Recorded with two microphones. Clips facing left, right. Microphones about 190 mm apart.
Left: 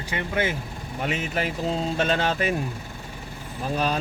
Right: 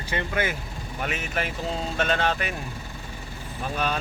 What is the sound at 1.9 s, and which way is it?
Speech, 35° left (ahead or behind).